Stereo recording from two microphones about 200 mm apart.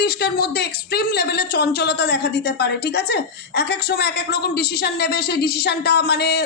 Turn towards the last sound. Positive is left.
turn(degrees=55)  # may be behind; listen again after turning